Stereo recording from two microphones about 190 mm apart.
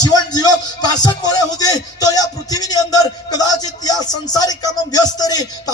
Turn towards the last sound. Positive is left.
turn(degrees=20)  # may be behind; listen again after turning